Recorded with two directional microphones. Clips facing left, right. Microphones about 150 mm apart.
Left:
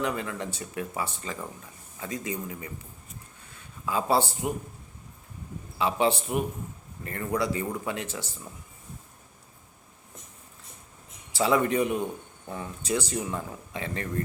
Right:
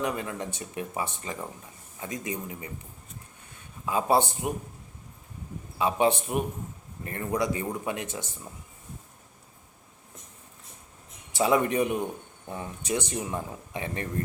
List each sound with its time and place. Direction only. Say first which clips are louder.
0.0 s speech: even; 20° right (ahead or behind)
3.8 s speech: right 1 dB; 20° right (ahead or behind)
5.8 s speech: right 1 dB; 20° right (ahead or behind)
11.3 s speech: even; 20° right (ahead or behind)